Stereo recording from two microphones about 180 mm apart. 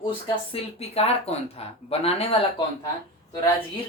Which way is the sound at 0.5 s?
35° left (ahead or behind).